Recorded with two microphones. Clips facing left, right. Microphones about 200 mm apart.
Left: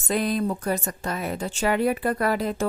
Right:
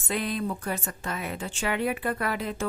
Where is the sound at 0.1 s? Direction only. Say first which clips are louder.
Left 5 dB; 40° left (ahead or behind).